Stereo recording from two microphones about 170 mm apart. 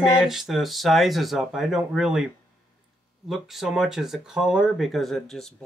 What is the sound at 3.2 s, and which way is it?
Speech, centre (ahead or behind).